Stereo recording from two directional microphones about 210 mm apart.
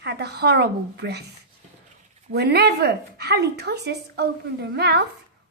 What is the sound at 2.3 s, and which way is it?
Speech, 50° right (ahead or behind).